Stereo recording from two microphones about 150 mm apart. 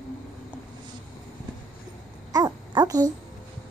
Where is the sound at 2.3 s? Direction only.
25° right (ahead or behind).